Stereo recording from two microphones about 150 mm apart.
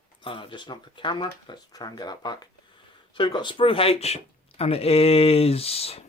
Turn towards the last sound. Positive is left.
turn(degrees=40)  # may be behind; listen again after turning